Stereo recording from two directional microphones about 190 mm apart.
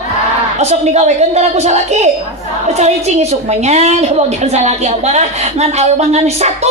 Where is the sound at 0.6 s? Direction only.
35° right (ahead or behind).